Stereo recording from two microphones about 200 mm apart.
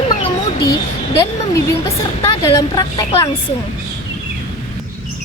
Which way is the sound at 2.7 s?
20° left (ahead or behind).